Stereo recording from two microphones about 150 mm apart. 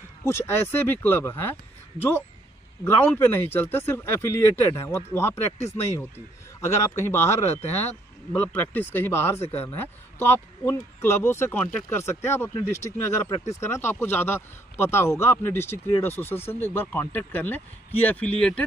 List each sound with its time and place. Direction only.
0.2 s speech: 15° left (ahead or behind)
2.8 s speech: 15° left (ahead or behind)